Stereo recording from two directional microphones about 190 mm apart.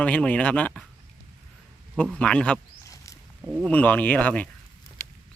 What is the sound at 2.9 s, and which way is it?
Wild animals, 15° left (ahead or behind).